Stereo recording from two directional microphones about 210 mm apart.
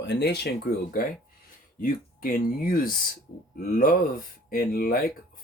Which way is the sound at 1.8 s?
40° left (ahead or behind).